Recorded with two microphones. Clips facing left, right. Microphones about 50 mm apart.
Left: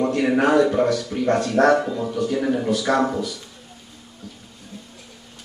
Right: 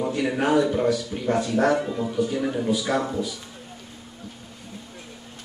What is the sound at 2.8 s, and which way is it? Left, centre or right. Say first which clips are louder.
Speech: left 5 dB; left.